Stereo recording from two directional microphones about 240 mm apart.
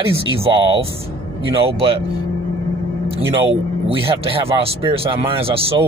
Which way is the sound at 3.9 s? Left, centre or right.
Right.